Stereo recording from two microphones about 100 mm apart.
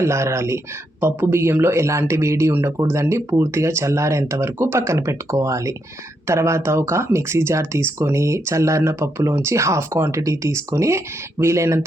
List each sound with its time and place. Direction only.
0.0 s speech: 30° right (ahead or behind)